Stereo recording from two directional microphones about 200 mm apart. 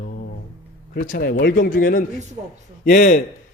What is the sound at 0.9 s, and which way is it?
A man's voice, 40° left (ahead or behind).